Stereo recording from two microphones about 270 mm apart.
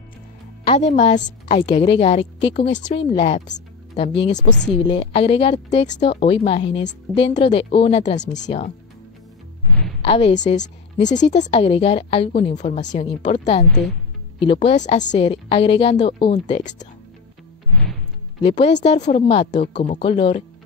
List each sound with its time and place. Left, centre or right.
0.7 s a woman's voice: left
10.0 s a woman's voice: left
18.4 s a woman's voice: left